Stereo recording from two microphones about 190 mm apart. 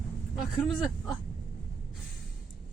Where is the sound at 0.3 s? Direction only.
Centre (ahead or behind).